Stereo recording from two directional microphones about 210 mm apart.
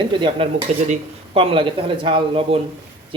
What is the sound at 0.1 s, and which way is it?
Speech, 25° right (ahead or behind).